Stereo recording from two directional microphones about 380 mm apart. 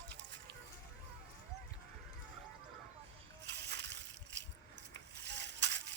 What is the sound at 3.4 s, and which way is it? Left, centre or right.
Slosh, right.